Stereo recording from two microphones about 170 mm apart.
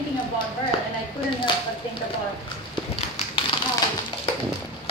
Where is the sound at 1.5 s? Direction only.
30° left (ahead or behind).